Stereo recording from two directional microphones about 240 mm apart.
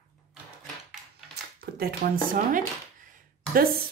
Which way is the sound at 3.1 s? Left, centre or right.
Right.